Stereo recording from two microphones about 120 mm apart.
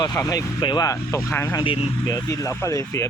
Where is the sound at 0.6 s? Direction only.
35° left (ahead or behind).